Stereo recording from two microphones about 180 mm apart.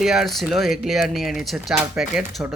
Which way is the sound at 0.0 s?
5° right (ahead or behind).